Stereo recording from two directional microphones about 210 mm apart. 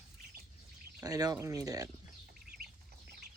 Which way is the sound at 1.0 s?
15° right (ahead or behind).